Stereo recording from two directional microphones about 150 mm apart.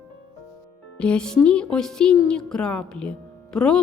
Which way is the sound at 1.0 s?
5° left (ahead or behind).